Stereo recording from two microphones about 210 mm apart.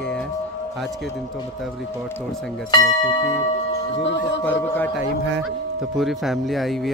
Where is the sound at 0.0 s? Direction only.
5° left (ahead or behind).